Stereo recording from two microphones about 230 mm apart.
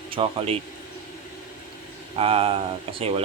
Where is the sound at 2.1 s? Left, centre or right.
Right.